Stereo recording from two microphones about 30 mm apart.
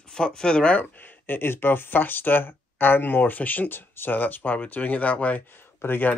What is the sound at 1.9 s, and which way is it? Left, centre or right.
Speech, left.